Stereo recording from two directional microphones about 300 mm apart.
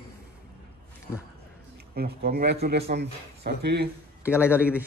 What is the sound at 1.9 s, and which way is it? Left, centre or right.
Speech, right.